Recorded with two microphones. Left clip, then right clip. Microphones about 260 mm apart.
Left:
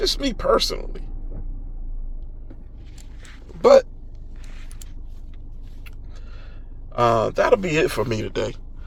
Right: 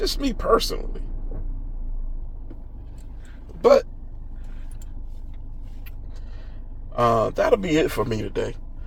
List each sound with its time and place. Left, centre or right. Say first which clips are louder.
0.0 s speech: left 3 dB; left
3.6 s speech: left 3 dB; left
6.9 s speech: left 1 dB; left